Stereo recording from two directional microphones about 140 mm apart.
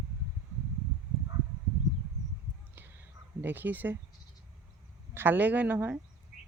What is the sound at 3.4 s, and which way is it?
Speech, 15° right (ahead or behind).